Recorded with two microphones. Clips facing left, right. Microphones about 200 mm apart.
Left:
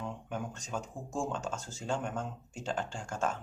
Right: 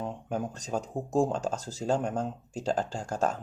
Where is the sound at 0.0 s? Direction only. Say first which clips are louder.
Right 6 dB; 35° right (ahead or behind).